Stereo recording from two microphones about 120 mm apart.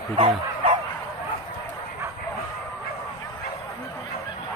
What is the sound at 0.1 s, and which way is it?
Bow-wow, 45° right (ahead or behind).